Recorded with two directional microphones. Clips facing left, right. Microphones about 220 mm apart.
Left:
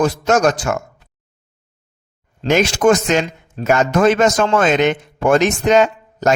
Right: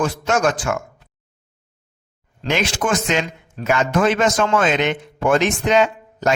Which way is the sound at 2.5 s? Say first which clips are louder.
Left 7 dB; 45° left (ahead or behind).